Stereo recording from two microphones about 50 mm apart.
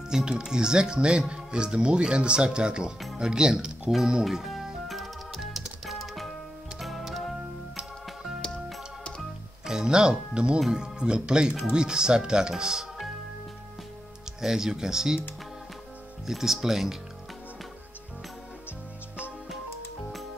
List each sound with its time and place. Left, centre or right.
0.1 s speech: centre
4.8 s music: centre
9.7 s speech: centre
14.4 s speech: centre
16.3 s speech: centre